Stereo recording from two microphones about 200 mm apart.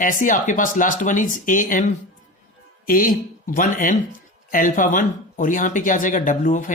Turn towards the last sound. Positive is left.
turn(degrees=40)  # may be behind; listen again after turning